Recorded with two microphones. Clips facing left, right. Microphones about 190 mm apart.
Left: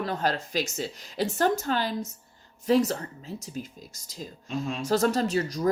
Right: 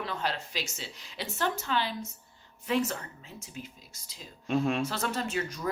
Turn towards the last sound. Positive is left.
turn(degrees=35)  # may be behind; listen again after turning